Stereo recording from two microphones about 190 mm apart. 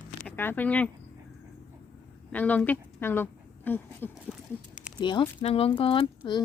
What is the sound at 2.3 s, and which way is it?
A woman's voice, 10° left (ahead or behind).